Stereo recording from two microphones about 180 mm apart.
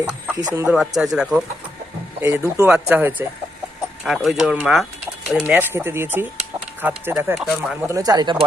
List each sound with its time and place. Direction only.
0.5 s speech: 10° right (ahead or behind)
2.2 s speech: 15° right (ahead or behind)
7.9 s speech: 20° right (ahead or behind)